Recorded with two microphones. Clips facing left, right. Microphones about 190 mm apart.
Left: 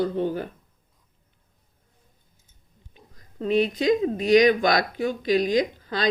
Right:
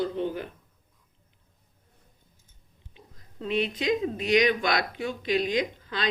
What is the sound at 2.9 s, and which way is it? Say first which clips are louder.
Speech: left 6 dB; 40° left (ahead or behind).